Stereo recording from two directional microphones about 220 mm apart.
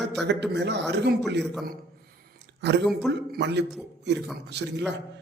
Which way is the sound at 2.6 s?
50° right (ahead or behind).